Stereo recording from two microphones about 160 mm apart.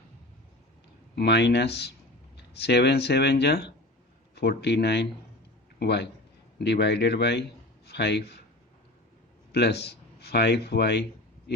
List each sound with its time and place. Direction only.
1.1 s a man's voice: 90° left
9.5 s speech: 90° left